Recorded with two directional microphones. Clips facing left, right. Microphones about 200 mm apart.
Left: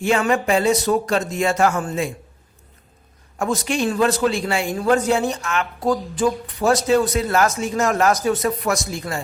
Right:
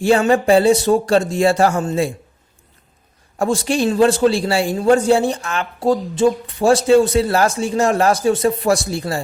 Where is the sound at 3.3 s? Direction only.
30° right (ahead or behind).